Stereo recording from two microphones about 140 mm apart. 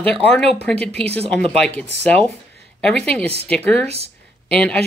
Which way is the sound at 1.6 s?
10° left (ahead or behind).